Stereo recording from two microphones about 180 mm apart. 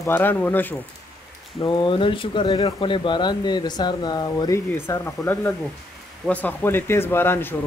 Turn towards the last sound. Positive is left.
turn(degrees=10)  # may be behind; listen again after turning